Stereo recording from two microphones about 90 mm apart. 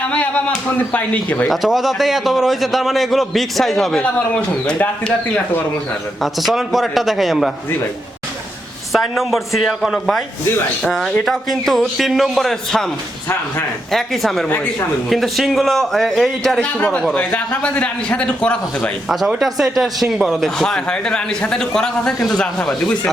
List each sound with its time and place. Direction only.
0.0 s a man's voice: 15° left (ahead or behind)
1.5 s a man's voice: centre (ahead or behind)
4.0 s a man's voice: 15° left (ahead or behind)
6.2 s a man's voice: centre (ahead or behind)
8.9 s a man's voice: centre (ahead or behind)
11.3 s a man's voice: centre (ahead or behind)
13.9 s a man's voice: centre (ahead or behind)
14.4 s a man's voice: 15° left (ahead or behind)
15.1 s a man's voice: centre (ahead or behind)
16.7 s a man's voice: 15° left (ahead or behind)
19.0 s a man's voice: centre (ahead or behind)